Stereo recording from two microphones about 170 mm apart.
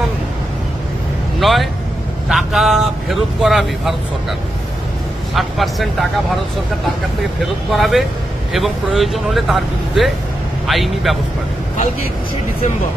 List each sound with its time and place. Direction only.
1.4 s speech: centre (ahead or behind)
5.3 s speech: centre (ahead or behind)
7.7 s speech: centre (ahead or behind)